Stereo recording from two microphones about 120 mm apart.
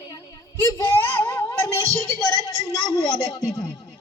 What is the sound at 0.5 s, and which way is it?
A man's voice, 25° left (ahead or behind).